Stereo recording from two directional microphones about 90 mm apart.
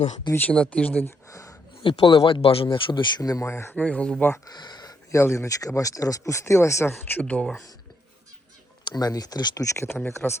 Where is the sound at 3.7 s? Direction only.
15° left (ahead or behind).